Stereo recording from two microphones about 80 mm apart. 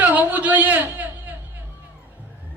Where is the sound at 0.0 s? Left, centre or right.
Right.